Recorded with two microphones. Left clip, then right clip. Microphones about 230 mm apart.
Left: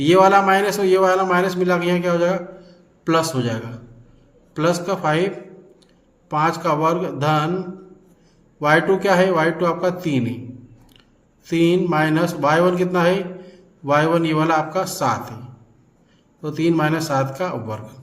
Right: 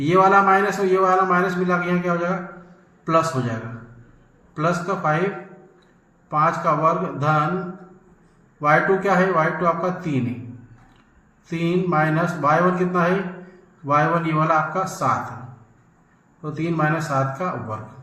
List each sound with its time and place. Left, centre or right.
0.0 s a man's voice: left
4.6 s a man's voice: left
6.2 s a man's voice: left
8.6 s a man's voice: left
11.4 s a man's voice: left
16.4 s a man's voice: left